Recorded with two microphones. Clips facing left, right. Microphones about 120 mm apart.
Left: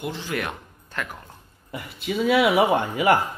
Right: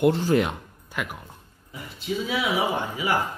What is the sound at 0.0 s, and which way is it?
Speech, 55° right (ahead or behind).